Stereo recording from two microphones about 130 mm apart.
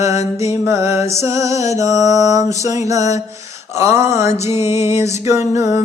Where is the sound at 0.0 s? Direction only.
25° right (ahead or behind).